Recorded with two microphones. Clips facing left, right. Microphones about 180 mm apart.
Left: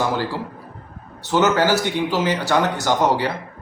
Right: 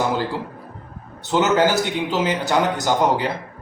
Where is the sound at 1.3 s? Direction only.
20° right (ahead or behind).